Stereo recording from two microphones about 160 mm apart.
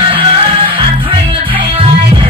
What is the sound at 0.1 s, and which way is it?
Music, 30° right (ahead or behind).